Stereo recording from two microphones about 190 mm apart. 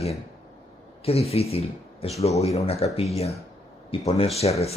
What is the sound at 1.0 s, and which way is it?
Speech, 30° left (ahead or behind).